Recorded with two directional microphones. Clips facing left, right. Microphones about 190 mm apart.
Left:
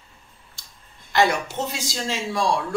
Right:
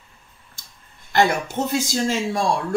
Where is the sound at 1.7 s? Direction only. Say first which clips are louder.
Right 7 dB; 50° right (ahead or behind).